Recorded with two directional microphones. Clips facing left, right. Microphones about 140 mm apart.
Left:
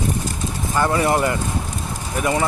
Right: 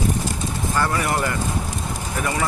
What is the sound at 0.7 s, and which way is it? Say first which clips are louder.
Speech: left 5 dB; 20° left (ahead or behind).